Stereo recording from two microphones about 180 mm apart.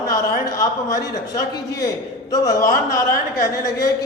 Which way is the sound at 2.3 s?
20° left (ahead or behind).